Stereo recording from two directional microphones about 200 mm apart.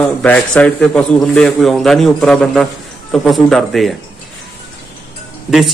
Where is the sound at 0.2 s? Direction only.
5° left (ahead or behind).